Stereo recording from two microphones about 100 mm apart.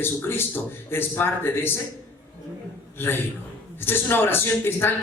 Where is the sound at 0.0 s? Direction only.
25° left (ahead or behind).